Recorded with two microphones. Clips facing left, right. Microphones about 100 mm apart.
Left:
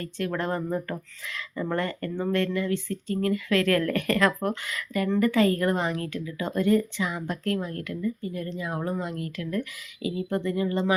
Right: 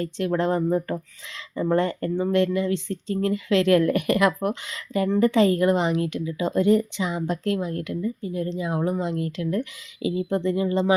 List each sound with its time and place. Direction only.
0.0 s a woman's voice: 25° right (ahead or behind)
4.6 s a woman's voice: 25° right (ahead or behind)